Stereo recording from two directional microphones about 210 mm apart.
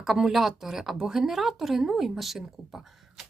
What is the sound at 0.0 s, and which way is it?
Speech, centre (ahead or behind).